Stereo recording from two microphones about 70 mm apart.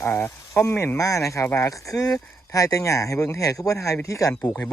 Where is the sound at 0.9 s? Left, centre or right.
Left.